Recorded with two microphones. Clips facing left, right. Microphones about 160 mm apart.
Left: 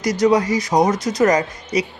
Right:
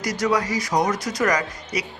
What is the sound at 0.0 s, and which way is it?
A man's voice, 20° left (ahead or behind).